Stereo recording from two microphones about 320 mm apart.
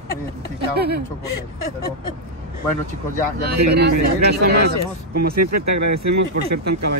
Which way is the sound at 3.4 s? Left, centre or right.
Right.